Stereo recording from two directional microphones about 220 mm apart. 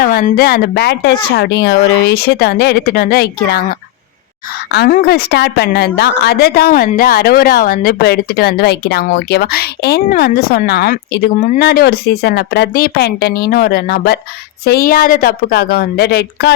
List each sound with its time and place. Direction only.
0.0 s a woman's voice: 40° left (ahead or behind)